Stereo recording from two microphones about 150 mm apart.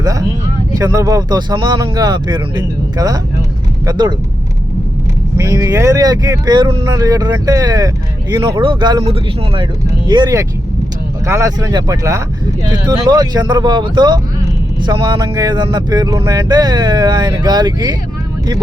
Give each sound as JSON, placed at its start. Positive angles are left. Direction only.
{"t": 0.0, "sound": "a sound", "side_deg": -20}
{"t": 0.7, "sound": "speech", "side_deg": -25}
{"t": 5.4, "sound": "speech", "side_deg": -25}
{"t": 10.1, "sound": "speech", "side_deg": -25}